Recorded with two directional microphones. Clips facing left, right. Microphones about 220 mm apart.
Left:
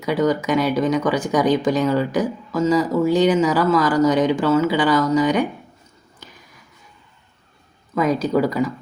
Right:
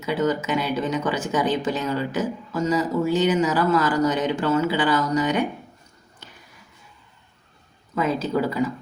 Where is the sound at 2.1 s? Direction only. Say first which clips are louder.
Left 4 dB; 10° left (ahead or behind).